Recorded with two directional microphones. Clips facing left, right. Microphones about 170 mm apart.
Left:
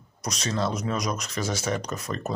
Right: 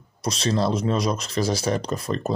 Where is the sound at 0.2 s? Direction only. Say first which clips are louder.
Right 5 dB; 30° right (ahead or behind).